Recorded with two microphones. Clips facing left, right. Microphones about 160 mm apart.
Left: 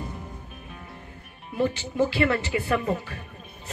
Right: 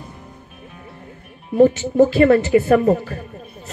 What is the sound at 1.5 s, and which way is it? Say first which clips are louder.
A woman's voice: right 12 dB; 45° right (ahead or behind).